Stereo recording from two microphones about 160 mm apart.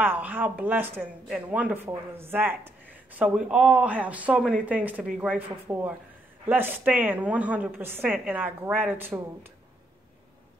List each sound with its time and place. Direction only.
0.0 s speech: 10° right (ahead or behind)